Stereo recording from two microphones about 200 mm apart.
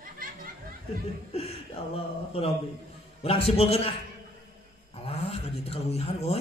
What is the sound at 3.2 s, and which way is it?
Speech, 30° left (ahead or behind).